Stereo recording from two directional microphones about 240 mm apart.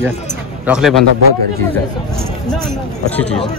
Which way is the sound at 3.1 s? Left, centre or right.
Centre.